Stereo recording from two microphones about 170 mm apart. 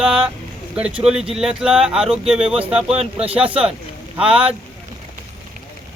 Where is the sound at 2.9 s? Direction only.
35° right (ahead or behind).